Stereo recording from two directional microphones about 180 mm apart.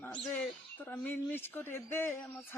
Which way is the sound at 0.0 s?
5° left (ahead or behind).